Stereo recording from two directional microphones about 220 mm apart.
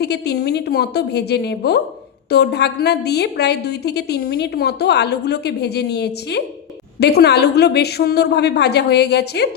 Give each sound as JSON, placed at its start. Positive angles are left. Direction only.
{"t": 0.0, "sound": "a woman's voice", "side_deg": 50}